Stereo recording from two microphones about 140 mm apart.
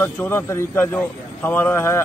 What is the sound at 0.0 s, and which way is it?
Speech, 15° left (ahead or behind).